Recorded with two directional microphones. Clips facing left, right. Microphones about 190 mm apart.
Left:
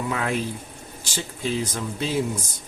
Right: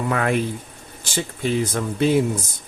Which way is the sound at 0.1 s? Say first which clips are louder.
Right 7 dB; 60° right (ahead or behind).